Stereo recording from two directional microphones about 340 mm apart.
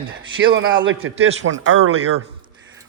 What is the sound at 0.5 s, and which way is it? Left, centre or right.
A man's voice, right.